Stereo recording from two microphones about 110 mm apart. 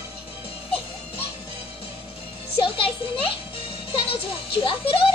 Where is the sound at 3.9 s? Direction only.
55° left (ahead or behind).